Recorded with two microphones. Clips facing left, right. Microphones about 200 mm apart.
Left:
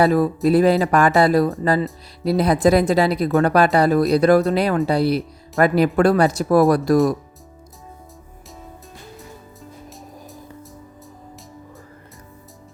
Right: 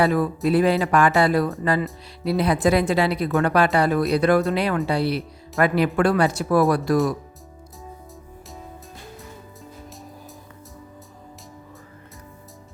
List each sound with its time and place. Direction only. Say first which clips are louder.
0.0 s speech: left 4 dB; 40° left (ahead or behind)